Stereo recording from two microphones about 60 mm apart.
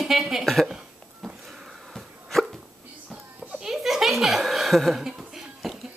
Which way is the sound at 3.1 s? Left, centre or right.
Centre.